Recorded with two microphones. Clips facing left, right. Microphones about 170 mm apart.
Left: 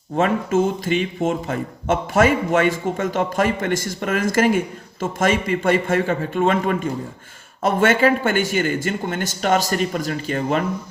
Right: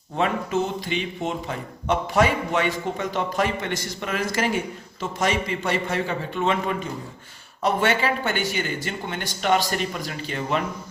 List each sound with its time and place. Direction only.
0.2 s speech: 45° left (ahead or behind)